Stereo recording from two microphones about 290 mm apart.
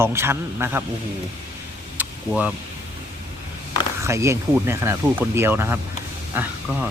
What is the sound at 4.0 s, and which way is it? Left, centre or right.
Speech, centre.